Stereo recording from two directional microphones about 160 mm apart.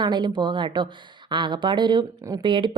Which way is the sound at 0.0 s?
30° right (ahead or behind).